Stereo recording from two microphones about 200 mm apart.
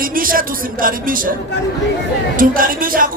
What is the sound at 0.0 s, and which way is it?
Music, 45° right (ahead or behind).